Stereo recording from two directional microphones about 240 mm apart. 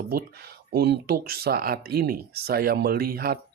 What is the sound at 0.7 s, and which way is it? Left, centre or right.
Speech, right.